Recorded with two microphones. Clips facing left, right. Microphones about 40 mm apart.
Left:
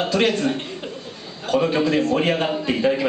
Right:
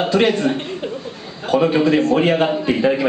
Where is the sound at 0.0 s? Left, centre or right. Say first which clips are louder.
Right 4 dB; centre.